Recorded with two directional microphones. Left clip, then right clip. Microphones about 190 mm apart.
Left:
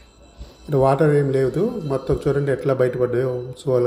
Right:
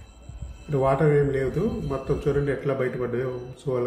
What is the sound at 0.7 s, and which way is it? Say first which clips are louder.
A man's voice: left 5 dB; 40° left (ahead or behind).